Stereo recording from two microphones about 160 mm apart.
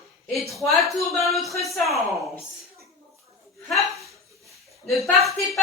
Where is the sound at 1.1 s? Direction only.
Centre (ahead or behind).